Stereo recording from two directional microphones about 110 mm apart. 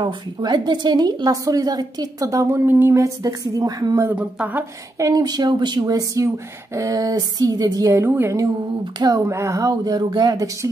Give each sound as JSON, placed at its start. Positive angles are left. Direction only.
{"t": 0.0, "sound": "a woman's voice", "side_deg": -45}
{"t": 4.0, "sound": "speech", "side_deg": -10}
{"t": 4.9, "sound": "a woman's voice", "side_deg": -30}